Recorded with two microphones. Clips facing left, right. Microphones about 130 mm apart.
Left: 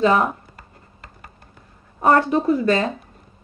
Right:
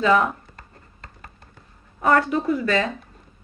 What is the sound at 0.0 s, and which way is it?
Speech, 35° left (ahead or behind).